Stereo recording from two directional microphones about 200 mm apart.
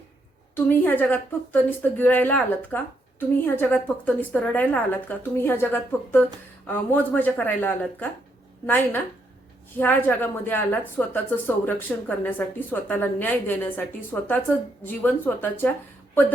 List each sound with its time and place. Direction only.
0.5 s a woman's voice: 10° left (ahead or behind)